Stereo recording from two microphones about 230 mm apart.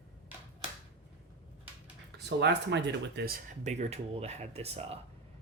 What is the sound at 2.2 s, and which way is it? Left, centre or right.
Speech, right.